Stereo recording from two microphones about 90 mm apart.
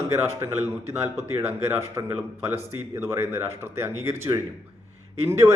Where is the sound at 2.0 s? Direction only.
40° right (ahead or behind).